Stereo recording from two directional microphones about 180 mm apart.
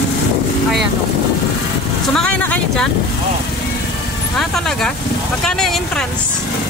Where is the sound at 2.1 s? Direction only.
5° left (ahead or behind).